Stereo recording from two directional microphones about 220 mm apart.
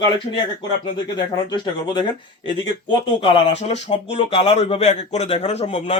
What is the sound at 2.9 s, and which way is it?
A man's voice, 25° left (ahead or behind).